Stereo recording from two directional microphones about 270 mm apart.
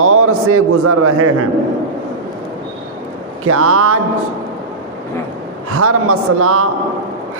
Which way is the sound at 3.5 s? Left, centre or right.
Right.